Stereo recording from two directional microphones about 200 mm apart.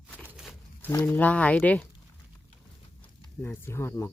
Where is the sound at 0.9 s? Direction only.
10° left (ahead or behind).